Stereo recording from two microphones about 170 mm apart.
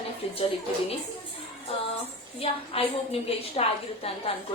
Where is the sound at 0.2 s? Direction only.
35° left (ahead or behind).